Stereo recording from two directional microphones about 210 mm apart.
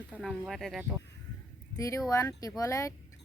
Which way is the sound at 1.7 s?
15° left (ahead or behind).